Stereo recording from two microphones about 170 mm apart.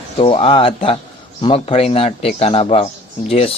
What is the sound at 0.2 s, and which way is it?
Speech, 35° left (ahead or behind).